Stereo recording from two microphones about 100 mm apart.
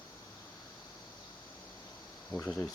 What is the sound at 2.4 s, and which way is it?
Speech, 10° left (ahead or behind).